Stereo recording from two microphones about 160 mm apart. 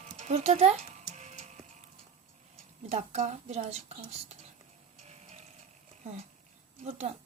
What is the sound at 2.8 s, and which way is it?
Speech, 45° right (ahead or behind).